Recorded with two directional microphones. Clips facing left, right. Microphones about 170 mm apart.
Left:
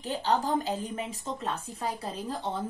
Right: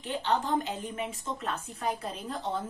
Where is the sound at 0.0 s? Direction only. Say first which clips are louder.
Left 2 dB; 40° left (ahead or behind).